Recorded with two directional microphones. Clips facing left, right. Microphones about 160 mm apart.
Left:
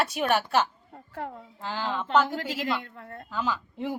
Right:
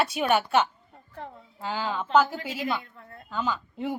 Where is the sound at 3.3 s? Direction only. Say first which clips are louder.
Right 1 dB; centre (ahead or behind).